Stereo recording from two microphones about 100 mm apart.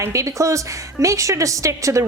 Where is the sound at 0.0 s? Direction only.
30° right (ahead or behind).